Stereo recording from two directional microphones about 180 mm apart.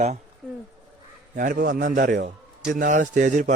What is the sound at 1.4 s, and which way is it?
A man's voice, 50° right (ahead or behind).